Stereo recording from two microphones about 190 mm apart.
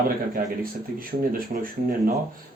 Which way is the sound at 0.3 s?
50° right (ahead or behind).